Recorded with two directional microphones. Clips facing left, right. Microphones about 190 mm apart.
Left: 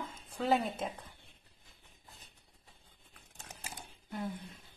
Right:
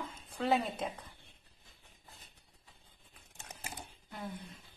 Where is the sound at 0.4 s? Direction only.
Centre (ahead or behind).